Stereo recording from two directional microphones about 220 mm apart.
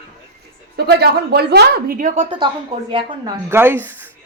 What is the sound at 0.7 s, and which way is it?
Speech, 45° right (ahead or behind).